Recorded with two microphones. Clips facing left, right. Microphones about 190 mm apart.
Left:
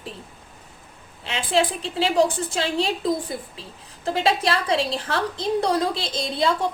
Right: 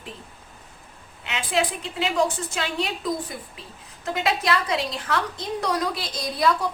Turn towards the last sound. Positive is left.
turn(degrees=25)  # may be behind; listen again after turning